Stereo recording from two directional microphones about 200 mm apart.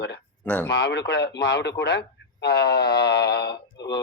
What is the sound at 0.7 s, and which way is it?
A man's voice, 60° left (ahead or behind).